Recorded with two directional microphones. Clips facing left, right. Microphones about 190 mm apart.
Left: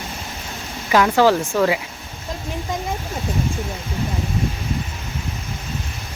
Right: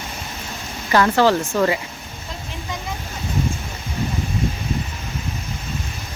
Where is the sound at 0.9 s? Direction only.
10° left (ahead or behind).